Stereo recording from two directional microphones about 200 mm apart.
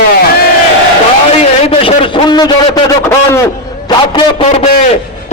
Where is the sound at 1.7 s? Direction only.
25° left (ahead or behind).